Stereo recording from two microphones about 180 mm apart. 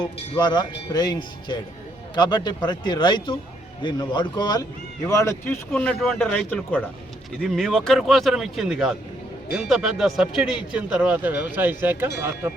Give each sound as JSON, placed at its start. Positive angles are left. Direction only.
{"t": 0.0, "sound": "speech", "side_deg": 25}